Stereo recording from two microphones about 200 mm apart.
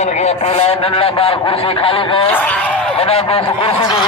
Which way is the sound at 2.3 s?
5° left (ahead or behind).